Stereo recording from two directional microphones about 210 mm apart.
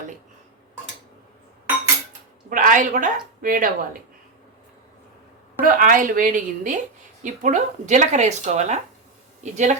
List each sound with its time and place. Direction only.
2.5 s speech: 40° right (ahead or behind)
5.6 s speech: 40° right (ahead or behind)